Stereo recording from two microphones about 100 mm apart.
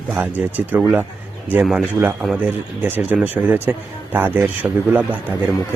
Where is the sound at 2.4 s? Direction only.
15° right (ahead or behind).